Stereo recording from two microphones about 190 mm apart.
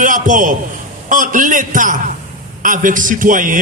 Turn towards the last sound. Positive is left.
turn(degrees=-45)  # may be behind; listen again after turning